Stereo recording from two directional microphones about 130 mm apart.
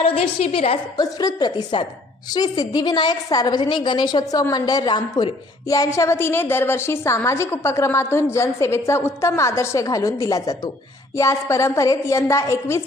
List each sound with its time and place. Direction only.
0.0 s a woman's voice: 50° left (ahead or behind)
0.9 s a woman's voice: 30° left (ahead or behind)